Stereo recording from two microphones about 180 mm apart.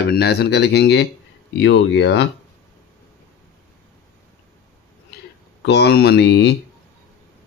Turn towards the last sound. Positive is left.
turn(degrees=70)  # may be behind; listen again after turning